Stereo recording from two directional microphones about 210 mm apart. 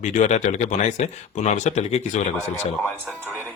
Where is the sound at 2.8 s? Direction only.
5° left (ahead or behind).